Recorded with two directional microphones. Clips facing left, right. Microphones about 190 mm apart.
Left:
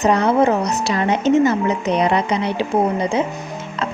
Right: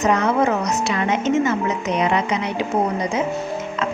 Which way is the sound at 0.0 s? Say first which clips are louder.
Left 3 dB; 35° left (ahead or behind).